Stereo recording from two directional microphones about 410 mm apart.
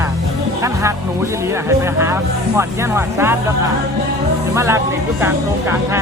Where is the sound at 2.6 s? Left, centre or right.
Centre.